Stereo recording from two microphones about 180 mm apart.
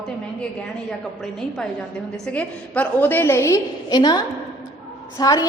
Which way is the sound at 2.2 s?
10° left (ahead or behind).